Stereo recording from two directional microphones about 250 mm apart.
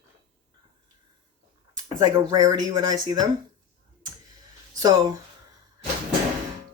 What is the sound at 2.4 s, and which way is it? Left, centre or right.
Speech, centre.